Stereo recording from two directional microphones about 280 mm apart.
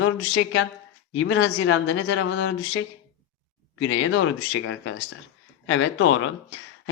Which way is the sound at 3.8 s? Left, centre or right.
Left.